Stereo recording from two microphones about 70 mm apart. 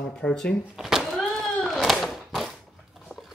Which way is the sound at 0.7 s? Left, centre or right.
Centre.